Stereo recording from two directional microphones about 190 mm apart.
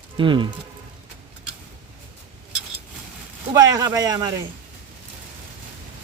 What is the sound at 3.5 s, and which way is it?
Speech, 20° right (ahead or behind).